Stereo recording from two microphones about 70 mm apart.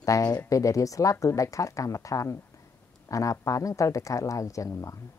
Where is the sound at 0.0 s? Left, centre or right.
Left.